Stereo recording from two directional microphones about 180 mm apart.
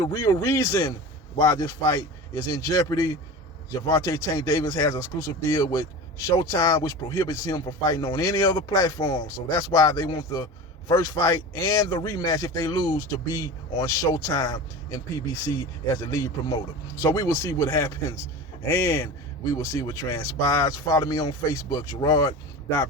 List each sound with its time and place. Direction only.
0.0 s speech: 20° left (ahead or behind)